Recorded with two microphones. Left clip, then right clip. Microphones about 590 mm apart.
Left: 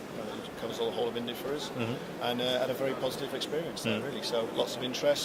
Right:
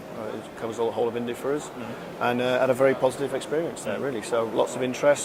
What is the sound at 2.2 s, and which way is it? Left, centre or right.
A man's voice, right.